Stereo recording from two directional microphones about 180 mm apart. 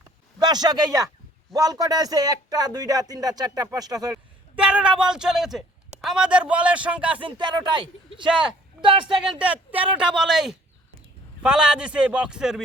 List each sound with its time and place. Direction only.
0.3 s speech: 20° right (ahead or behind)
4.5 s a woman's voice: 5° right (ahead or behind)
7.2 s speech: 25° right (ahead or behind)
9.4 s a woman's voice: 10° right (ahead or behind)